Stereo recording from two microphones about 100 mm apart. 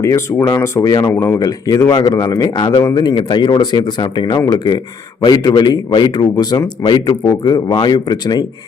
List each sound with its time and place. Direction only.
0.0 s a man's voice: 35° left (ahead or behind)